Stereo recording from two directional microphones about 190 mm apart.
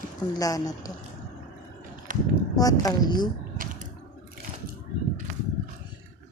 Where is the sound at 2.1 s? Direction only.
45° right (ahead or behind).